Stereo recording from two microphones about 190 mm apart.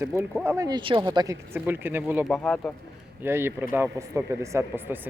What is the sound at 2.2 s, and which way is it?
Speech, 5° left (ahead or behind).